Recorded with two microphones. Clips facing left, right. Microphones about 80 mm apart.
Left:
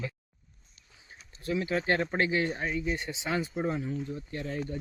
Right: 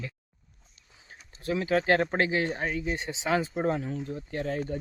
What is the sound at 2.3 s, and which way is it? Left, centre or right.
Speech, right.